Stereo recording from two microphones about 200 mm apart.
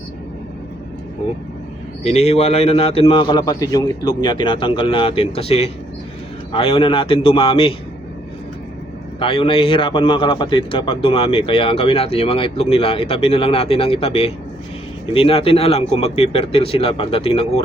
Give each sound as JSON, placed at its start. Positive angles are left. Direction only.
{"t": 2.0, "sound": "a man's voice", "side_deg": 30}
{"t": 9.1, "sound": "a man's voice", "side_deg": 25}